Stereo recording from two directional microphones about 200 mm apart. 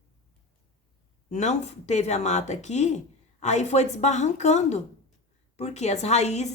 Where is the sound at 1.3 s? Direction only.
35° left (ahead or behind).